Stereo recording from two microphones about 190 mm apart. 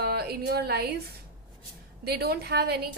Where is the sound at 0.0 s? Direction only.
55° right (ahead or behind).